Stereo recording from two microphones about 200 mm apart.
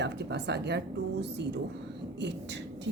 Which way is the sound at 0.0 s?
60° right (ahead or behind).